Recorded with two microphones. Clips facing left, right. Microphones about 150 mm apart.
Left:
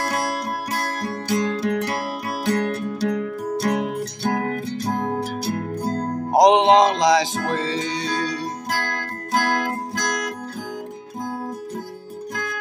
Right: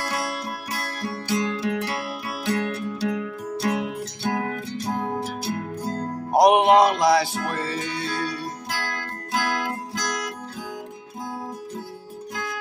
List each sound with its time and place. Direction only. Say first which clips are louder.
0.0 s music: left 4 dB; 40° left (ahead or behind)
6.5 s music: left 1 dB; 25° left (ahead or behind)
7.0 s music: left 2 dB; 90° left
8.7 s music: left 4 dB; 40° left (ahead or behind)